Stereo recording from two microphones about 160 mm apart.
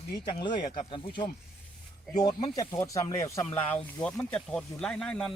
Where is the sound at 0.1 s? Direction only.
30° left (ahead or behind).